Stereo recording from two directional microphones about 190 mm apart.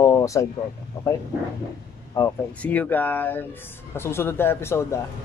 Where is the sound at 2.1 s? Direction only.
10° left (ahead or behind).